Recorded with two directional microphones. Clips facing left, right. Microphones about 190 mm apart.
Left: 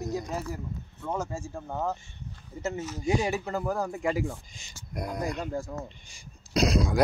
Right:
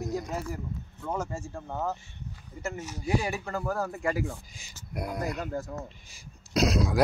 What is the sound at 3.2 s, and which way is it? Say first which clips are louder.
Speech: left 3 dB; 20° left (ahead or behind).